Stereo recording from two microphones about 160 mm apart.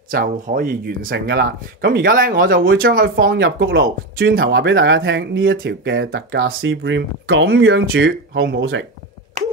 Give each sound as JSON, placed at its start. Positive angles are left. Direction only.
{"t": 0.1, "sound": "speech", "side_deg": -65}